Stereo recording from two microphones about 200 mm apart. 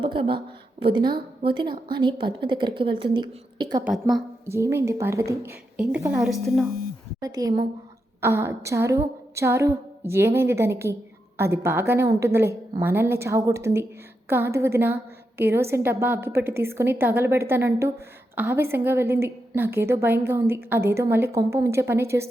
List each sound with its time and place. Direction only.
0.0 s a woman's voice: 25° right (ahead or behind)
3.8 s speech: centre (ahead or behind)
4.4 s a woman's voice: 15° right (ahead or behind)
7.2 s a woman's voice: 20° right (ahead or behind)